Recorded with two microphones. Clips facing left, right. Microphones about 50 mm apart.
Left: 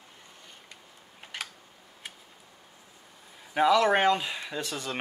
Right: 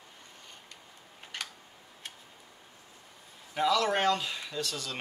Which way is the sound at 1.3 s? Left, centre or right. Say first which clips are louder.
Left 2 dB; centre.